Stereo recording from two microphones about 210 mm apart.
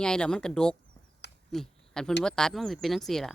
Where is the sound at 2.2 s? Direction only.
5° left (ahead or behind).